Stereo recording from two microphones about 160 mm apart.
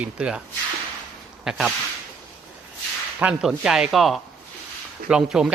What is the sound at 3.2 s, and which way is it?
Speech, 5° right (ahead or behind).